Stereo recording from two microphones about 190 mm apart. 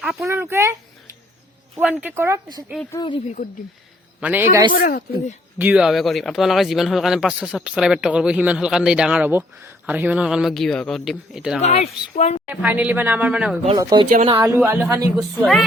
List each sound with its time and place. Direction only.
0.0 s speech: 5° right (ahead or behind)
1.8 s speech: 5° right (ahead or behind)
2.9 s speech: 25° left (ahead or behind)
4.2 s speech: 10° right (ahead or behind)
4.7 s speech: 50° left (ahead or behind)
5.5 s speech: 5° right (ahead or behind)
11.6 s a woman's voice: 35° left (ahead or behind)
12.5 s speech: 10° right (ahead or behind)
13.7 s speech: 25° right (ahead or behind)
14.1 s a woman's voice: 40° right (ahead or behind)
14.3 s speech: 15° right (ahead or behind)
15.4 s speech: centre (ahead or behind)